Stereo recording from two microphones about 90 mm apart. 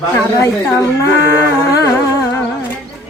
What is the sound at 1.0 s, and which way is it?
Male singing, 35° left (ahead or behind).